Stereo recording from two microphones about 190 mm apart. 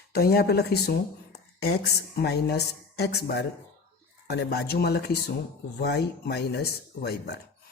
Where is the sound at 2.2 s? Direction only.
60° left (ahead or behind).